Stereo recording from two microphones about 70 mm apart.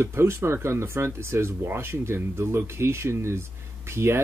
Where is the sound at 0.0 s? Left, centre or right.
Right.